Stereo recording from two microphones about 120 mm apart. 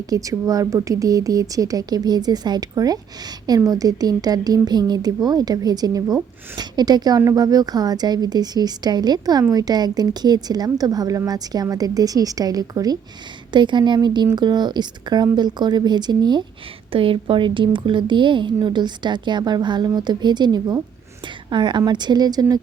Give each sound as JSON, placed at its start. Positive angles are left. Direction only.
{"t": 0.1, "sound": "a woman's voice", "side_deg": -30}
{"t": 16.9, "sound": "a woman's voice", "side_deg": -50}